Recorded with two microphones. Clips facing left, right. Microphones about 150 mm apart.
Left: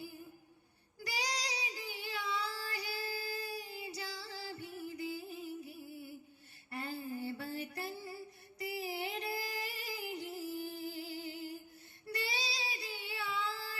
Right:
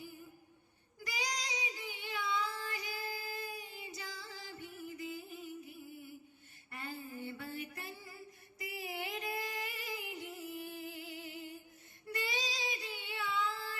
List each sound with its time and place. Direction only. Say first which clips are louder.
0.9 s child singing: left 1 dB; 35° left (ahead or behind)
6.7 s a sound: left 4 dB; 35° left (ahead or behind)
12.0 s child singing: right 1 dB; 35° left (ahead or behind)